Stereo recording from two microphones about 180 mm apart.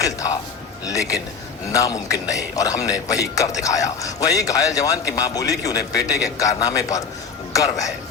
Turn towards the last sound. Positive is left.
turn(degrees=20)  # may be behind; listen again after turning